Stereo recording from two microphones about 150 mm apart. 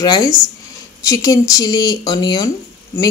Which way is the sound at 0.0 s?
25° left (ahead or behind).